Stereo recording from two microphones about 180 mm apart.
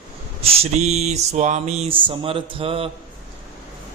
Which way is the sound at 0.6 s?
40° right (ahead or behind).